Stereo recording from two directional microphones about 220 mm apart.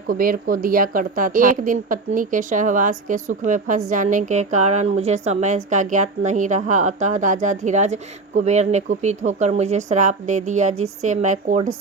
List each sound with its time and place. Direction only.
0.1 s a woman's voice: 40° right (ahead or behind)